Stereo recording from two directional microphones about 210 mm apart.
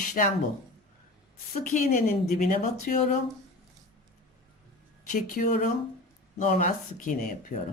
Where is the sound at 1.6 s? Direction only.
35° left (ahead or behind).